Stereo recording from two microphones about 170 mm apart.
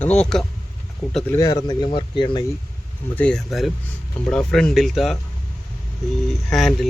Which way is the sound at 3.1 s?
5° left (ahead or behind).